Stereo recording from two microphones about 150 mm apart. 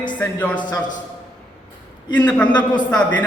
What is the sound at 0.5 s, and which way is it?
Speech, 30° left (ahead or behind).